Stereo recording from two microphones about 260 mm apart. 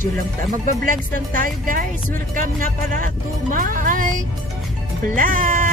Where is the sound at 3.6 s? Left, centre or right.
Right.